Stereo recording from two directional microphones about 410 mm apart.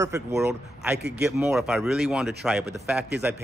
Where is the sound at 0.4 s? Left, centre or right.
Centre.